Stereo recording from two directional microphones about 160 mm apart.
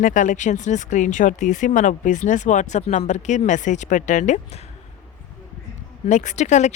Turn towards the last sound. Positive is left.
turn(degrees=45)  # may be behind; listen again after turning